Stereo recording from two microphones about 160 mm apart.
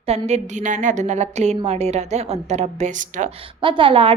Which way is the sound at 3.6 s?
30° right (ahead or behind).